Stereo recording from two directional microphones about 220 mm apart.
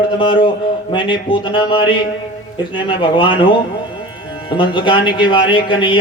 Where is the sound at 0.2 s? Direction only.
20° left (ahead or behind).